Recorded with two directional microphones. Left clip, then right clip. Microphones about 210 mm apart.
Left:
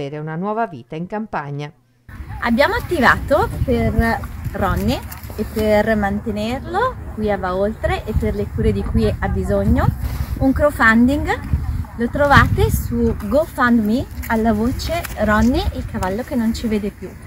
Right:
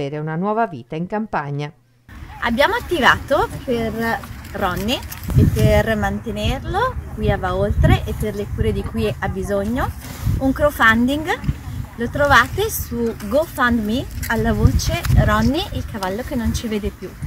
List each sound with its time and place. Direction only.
0.0 s speech: centre (ahead or behind)